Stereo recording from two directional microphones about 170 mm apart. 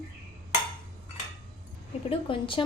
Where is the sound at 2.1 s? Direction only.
30° left (ahead or behind).